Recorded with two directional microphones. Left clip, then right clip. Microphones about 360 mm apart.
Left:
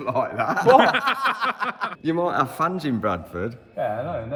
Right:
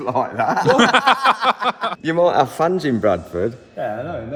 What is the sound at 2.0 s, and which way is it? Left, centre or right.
A man's voice, right.